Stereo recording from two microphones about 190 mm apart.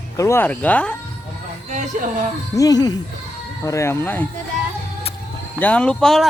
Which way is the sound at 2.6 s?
20° left (ahead or behind).